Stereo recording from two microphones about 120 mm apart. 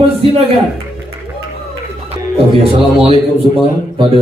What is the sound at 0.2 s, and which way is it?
Speech, 55° right (ahead or behind).